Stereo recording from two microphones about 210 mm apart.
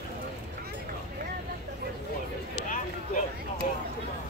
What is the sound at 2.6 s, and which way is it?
Run, 40° left (ahead or behind).